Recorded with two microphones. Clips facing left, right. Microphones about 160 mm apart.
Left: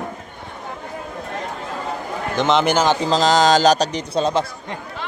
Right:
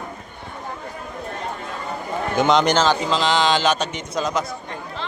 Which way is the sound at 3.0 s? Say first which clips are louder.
Left 4 dB; 40° left (ahead or behind).